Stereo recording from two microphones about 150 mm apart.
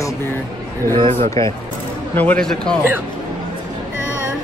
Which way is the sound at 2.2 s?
10° left (ahead or behind).